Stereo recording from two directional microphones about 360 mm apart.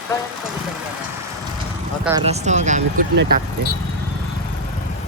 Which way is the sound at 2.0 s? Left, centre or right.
Centre.